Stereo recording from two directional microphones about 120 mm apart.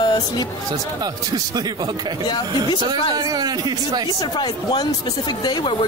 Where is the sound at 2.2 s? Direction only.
40° left (ahead or behind).